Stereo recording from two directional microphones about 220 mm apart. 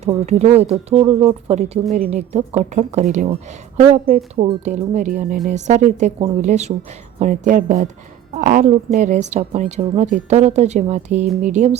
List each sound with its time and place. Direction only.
0.0 s a woman's voice: 30° right (ahead or behind)